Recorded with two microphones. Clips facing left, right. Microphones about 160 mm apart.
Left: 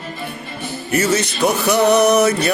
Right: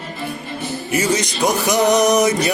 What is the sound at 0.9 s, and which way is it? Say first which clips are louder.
Music: left 2 dB; 15° right (ahead or behind).